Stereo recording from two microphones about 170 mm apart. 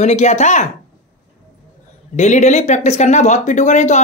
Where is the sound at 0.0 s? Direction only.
40° left (ahead or behind).